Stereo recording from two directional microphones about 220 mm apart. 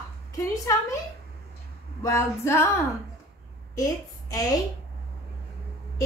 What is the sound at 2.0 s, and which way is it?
Speech, 10° left (ahead or behind).